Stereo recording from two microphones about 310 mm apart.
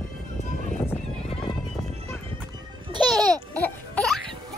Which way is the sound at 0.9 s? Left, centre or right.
Centre.